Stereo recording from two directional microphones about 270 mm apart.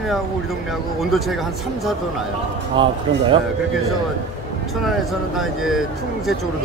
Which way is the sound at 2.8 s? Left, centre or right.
Centre.